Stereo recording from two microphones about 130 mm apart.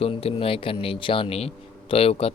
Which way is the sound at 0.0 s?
50° left (ahead or behind).